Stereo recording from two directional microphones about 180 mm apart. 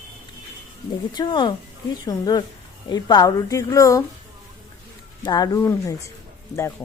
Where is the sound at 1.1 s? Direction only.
25° left (ahead or behind).